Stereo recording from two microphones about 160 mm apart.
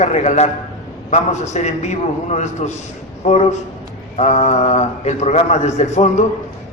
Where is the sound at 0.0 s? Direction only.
45° left (ahead or behind).